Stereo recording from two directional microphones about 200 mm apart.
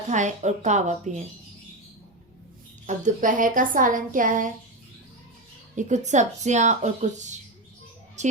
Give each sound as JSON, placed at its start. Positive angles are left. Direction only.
{"t": 0.1, "sound": "a woman's voice", "side_deg": -35}
{"t": 2.8, "sound": "a woman's voice", "side_deg": -40}
{"t": 5.7, "sound": "a woman's voice", "side_deg": -35}